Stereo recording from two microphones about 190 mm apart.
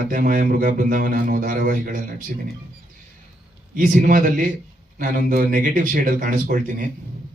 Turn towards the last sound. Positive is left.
turn(degrees=-45)  # may be behind; listen again after turning